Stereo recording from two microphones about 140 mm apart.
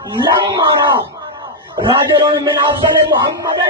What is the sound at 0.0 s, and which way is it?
Speech, 30° right (ahead or behind).